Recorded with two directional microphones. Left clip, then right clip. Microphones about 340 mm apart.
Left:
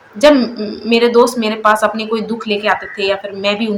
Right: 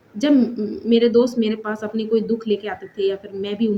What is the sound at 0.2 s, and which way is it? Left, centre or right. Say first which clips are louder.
A woman's voice: left 9 dB; right.